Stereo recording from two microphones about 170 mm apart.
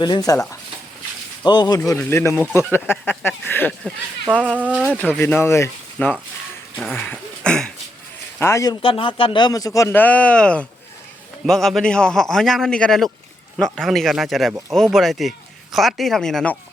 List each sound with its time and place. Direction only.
0.0 s a man's voice: 25° left (ahead or behind)
1.5 s a man's voice: 25° left (ahead or behind)
1.8 s speech: 15° left (ahead or behind)
4.5 s speech: 5° right (ahead or behind)
4.9 s speech: 10° left (ahead or behind)
6.9 s a sound: 10° left (ahead or behind)
8.4 s a man's voice: 15° left (ahead or behind)